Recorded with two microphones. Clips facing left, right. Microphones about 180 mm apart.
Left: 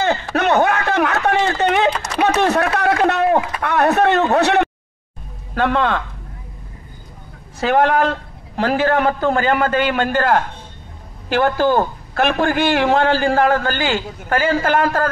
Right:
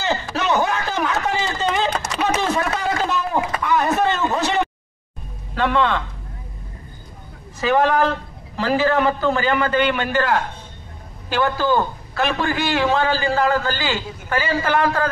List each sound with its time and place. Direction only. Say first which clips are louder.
0.0 s a sound: left 5 dB; 55° left (ahead or behind)
5.5 s speech: left 1 dB; 55° left (ahead or behind)
7.6 s a man's voice: left 2 dB; 60° left (ahead or behind)